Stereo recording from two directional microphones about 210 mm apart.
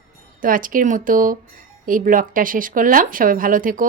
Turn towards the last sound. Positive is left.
turn(degrees=-40)  # may be behind; listen again after turning